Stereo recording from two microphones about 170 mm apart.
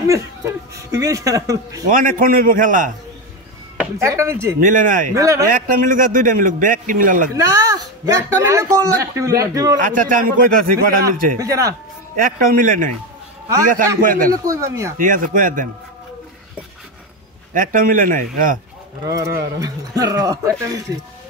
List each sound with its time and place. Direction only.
0.0 s speech: 20° right (ahead or behind)
1.9 s a man's voice: 55° right (ahead or behind)
4.0 s speech: 15° right (ahead or behind)
4.6 s a man's voice: 50° right (ahead or behind)
5.1 s speech: 20° right (ahead or behind)
5.5 s a man's voice: 55° right (ahead or behind)
7.3 s speech: 20° right (ahead or behind)
9.8 s a man's voice: 50° right (ahead or behind)
11.3 s speech: 20° right (ahead or behind)
12.2 s a man's voice: 55° right (ahead or behind)
14.3 s speech: 20° right (ahead or behind)
15.0 s a man's voice: 50° right (ahead or behind)
17.6 s a man's voice: 50° right (ahead or behind)
19.0 s speech: 20° right (ahead or behind)